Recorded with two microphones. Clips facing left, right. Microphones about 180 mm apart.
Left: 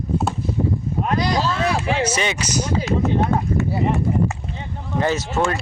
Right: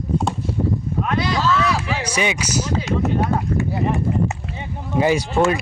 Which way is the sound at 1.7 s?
55° left (ahead or behind).